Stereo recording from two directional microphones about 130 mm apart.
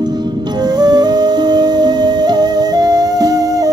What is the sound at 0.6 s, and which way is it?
Music, 30° right (ahead or behind).